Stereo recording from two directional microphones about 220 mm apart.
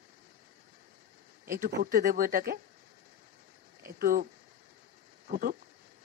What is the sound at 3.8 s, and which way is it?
Speech, 40° right (ahead or behind).